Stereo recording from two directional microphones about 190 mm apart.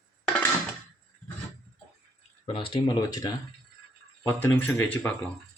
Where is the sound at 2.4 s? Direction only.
30° left (ahead or behind); by 5.3 s 10° left (ahead or behind).